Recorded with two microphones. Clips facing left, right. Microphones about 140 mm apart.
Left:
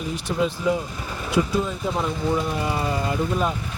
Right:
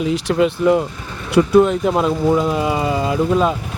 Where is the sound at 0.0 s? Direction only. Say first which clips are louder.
Right 8 dB; 90° right.